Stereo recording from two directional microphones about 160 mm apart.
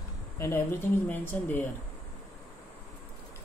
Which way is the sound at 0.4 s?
15° left (ahead or behind).